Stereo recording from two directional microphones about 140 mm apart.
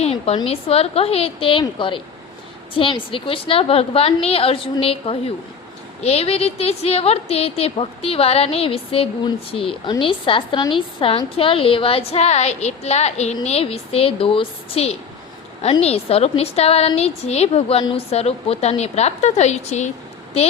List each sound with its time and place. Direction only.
0.0 s a woman's voice: 50° left (ahead or behind)